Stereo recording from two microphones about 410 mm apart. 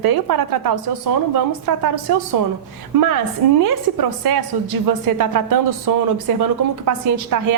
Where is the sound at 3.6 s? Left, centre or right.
Right.